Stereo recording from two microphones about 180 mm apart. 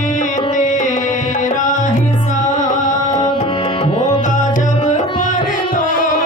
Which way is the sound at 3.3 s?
30° left (ahead or behind).